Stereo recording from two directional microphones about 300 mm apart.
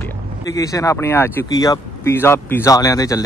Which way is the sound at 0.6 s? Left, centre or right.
Centre.